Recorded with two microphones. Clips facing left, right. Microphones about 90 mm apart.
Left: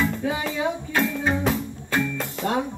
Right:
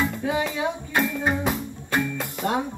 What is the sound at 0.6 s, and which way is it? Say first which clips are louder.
Music: left 1 dB; 10° right (ahead or behind).